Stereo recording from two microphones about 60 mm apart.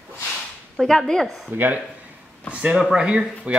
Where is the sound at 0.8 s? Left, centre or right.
Centre.